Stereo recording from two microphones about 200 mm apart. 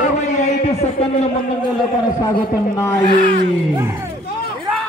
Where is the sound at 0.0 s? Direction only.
35° left (ahead or behind).